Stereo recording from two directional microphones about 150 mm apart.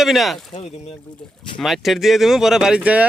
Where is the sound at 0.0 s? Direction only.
Centre (ahead or behind).